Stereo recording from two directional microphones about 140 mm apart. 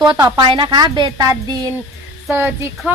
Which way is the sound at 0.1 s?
30° right (ahead or behind).